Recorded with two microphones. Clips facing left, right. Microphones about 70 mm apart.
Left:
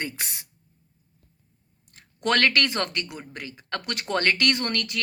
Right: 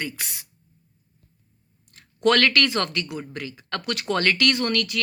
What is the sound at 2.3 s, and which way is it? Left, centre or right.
Speech, left.